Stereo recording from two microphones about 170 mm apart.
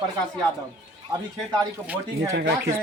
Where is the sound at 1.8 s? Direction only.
10° right (ahead or behind).